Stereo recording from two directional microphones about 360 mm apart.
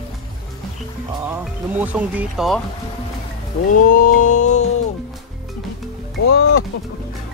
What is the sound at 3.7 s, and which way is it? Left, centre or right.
Music, left.